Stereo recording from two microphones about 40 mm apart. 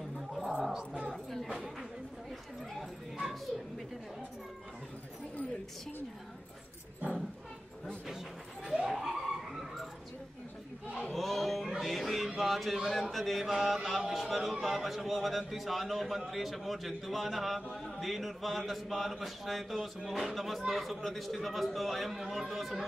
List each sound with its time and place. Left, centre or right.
1.1 s chatter: centre
1.5 s a sound: centre
3.2 s bow-wow: centre
8.6 s snicker: centre
8.9 s a sound: centre
11.1 s music: centre
11.6 s music: centre
11.9 s a sound: centre
13.1 s mantra: centre
16.3 s speech: centre